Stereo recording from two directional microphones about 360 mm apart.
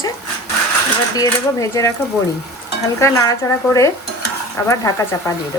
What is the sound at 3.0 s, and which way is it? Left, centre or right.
Speech, centre.